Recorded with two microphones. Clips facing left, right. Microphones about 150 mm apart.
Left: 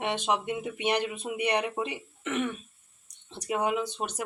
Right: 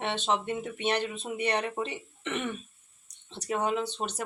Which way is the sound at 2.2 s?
Centre (ahead or behind).